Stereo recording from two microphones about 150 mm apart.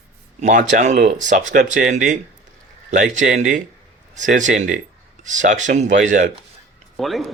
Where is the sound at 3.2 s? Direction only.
60° right (ahead or behind).